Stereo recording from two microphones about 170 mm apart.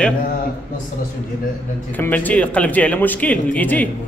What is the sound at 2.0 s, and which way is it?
Speech, 10° left (ahead or behind).